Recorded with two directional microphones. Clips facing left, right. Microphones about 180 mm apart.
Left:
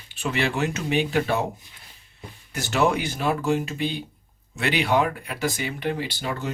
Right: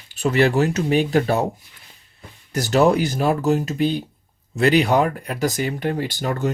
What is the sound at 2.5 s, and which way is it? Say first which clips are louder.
Speech: right 6 dB; 40° right (ahead or behind).